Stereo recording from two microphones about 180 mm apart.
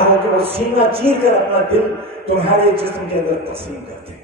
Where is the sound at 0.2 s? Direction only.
30° right (ahead or behind).